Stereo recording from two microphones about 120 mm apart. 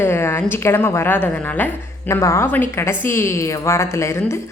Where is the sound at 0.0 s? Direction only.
20° left (ahead or behind).